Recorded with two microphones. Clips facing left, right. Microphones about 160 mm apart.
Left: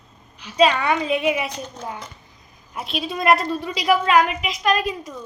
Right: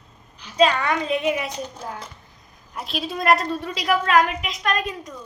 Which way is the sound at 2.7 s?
Centre (ahead or behind).